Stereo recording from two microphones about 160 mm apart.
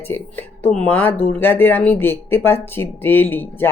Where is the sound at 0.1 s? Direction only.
10° left (ahead or behind).